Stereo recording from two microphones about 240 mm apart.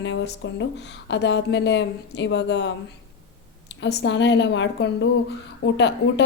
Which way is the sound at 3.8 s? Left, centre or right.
Left.